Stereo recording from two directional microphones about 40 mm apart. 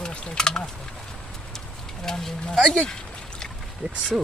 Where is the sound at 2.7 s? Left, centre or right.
Left.